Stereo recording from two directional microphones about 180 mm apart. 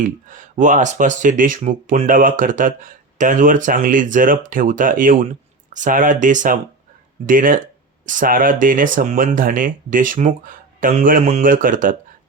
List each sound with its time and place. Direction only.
0.0 s speech: 45° right (ahead or behind)